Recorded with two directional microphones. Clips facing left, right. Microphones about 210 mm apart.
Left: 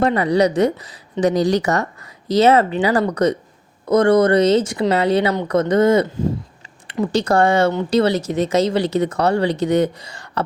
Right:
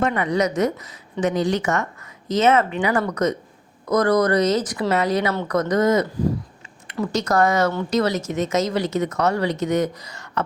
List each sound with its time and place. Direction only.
0.0 s a woman's voice: 35° left (ahead or behind)
5.3 s speech: 15° left (ahead or behind)
5.5 s a woman's voice: 25° left (ahead or behind)